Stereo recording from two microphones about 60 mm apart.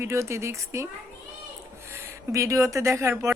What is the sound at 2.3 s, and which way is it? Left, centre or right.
Speech, right.